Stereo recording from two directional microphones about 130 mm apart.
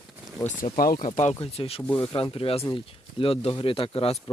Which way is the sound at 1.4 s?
50° left (ahead or behind).